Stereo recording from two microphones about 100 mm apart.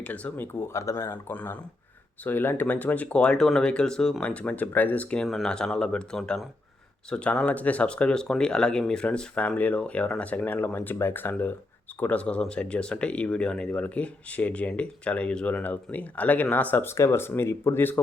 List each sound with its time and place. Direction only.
0.0 s speech: 15° left (ahead or behind)
5.2 s speech: 5° left (ahead or behind); by 18.0 s 20° left (ahead or behind)